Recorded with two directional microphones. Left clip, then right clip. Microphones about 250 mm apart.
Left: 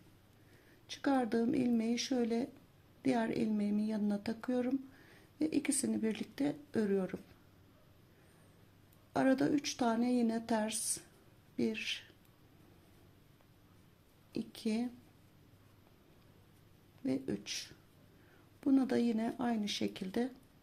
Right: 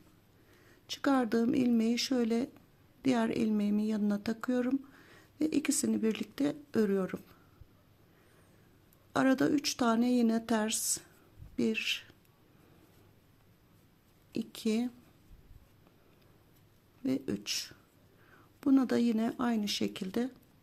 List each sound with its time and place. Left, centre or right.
0.9 s a woman's voice: right
9.1 s a woman's voice: right
14.3 s a woman's voice: centre
17.0 s a woman's voice: right